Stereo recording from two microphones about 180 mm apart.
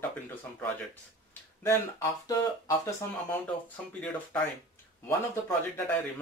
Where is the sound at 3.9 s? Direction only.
5° left (ahead or behind).